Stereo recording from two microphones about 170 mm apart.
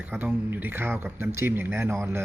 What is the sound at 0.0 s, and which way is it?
Speech, 5° right (ahead or behind).